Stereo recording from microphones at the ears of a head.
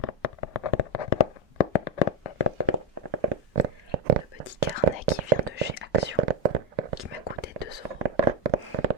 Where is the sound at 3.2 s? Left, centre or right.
Right.